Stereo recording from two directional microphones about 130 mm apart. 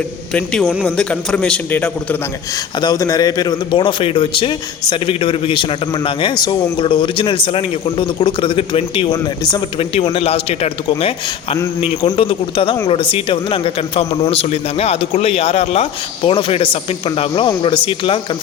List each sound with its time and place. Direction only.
0.3 s a man's voice: 10° left (ahead or behind)
2.8 s a man's voice: 30° left (ahead or behind)
9.4 s a man's voice: 30° left (ahead or behind)
9.7 s a man's voice: 45° left (ahead or behind)